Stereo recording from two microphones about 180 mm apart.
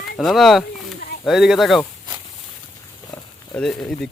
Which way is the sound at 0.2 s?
Centre (ahead or behind).